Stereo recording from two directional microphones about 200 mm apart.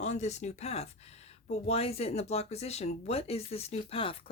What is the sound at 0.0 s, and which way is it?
Speech, 35° left (ahead or behind).